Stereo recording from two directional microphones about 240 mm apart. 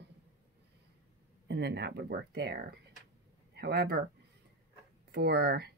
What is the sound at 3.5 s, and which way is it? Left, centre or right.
Speech, right.